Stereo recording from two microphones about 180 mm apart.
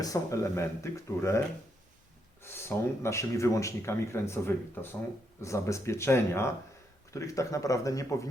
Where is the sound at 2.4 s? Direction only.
15° left (ahead or behind).